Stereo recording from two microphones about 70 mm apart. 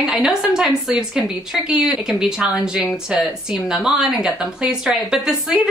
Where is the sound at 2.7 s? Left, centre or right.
Centre.